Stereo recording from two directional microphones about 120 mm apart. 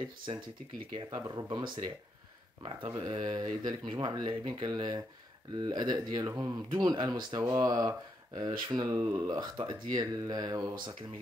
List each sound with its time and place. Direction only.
0.3 s speech: 55° right (ahead or behind)
0.9 s speech: 40° right (ahead or behind)
2.9 s speech: 35° right (ahead or behind)